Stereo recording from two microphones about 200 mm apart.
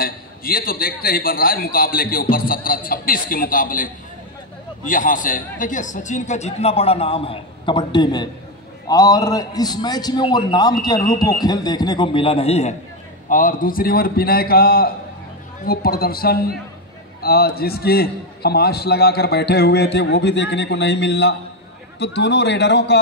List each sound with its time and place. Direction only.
0.0 s a man's voice: 45° left (ahead or behind); by 12.7 s 30° left (ahead or behind)
13.3 s a man's voice: 45° left (ahead or behind); by 22.9 s 60° left (ahead or behind)